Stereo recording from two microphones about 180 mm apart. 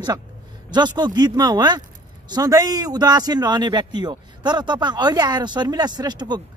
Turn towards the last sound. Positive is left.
turn(degrees=-25)  # may be behind; listen again after turning